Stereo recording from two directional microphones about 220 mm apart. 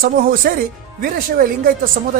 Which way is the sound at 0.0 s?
40° right (ahead or behind).